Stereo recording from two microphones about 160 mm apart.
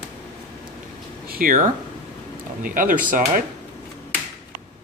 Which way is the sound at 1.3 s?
60° right (ahead or behind).